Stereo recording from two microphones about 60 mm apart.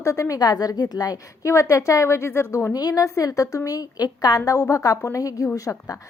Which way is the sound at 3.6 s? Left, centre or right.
Left.